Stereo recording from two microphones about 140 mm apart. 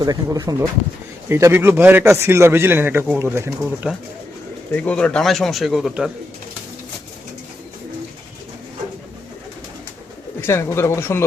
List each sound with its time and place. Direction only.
0.0 s a man's voice: 25° right (ahead or behind)
3.9 s speech: 5° right (ahead or behind)
4.7 s speech: 10° left (ahead or behind)
10.4 s speech: 20° left (ahead or behind)